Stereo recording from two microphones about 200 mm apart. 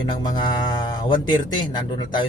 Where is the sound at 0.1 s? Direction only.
20° left (ahead or behind).